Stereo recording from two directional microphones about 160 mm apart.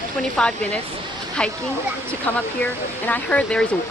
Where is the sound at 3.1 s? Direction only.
10° left (ahead or behind).